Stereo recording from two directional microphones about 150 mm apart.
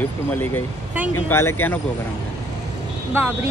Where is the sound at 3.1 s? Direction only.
15° right (ahead or behind).